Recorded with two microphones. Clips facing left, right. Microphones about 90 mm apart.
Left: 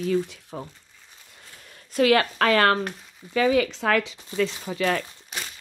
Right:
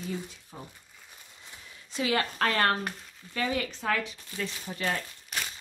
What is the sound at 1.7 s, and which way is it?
Speech, 60° left (ahead or behind).